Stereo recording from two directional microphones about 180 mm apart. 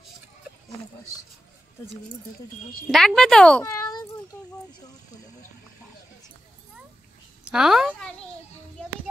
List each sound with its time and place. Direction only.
2.9 s speech: centre (ahead or behind)
3.6 s a child's voice: 20° left (ahead or behind)
7.4 s speech: 5° right (ahead or behind)